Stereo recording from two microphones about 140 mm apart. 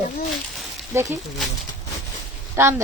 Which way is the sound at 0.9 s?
15° right (ahead or behind).